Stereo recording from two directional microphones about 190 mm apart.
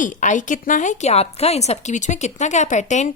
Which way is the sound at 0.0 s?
40° left (ahead or behind).